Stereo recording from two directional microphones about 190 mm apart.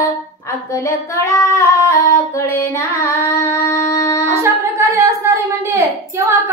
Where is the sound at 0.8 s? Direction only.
15° left (ahead or behind).